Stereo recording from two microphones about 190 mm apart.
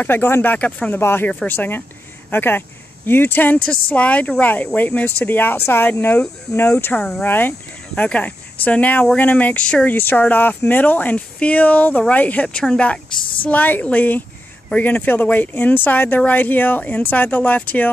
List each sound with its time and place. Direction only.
0.0 s speech: 10° left (ahead or behind)
13.1 s a woman's voice: 25° left (ahead or behind)
13.4 s speech: 10° left (ahead or behind)